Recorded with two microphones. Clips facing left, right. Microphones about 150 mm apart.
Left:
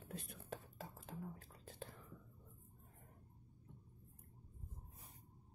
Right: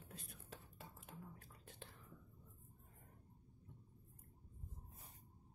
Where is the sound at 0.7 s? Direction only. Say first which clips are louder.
Left 6 dB; 35° left (ahead or behind).